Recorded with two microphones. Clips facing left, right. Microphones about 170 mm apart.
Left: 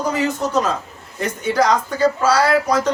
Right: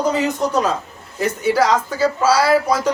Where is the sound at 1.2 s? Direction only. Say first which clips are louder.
Right 2 dB; 5° right (ahead or behind).